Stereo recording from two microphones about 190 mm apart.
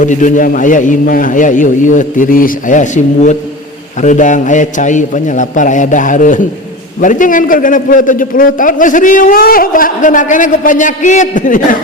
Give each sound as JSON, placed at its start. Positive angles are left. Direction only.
{"t": 0.0, "sound": "a man's voice", "side_deg": 40}